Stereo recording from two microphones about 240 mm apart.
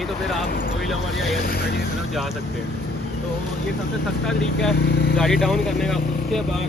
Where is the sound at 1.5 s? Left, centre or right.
Left.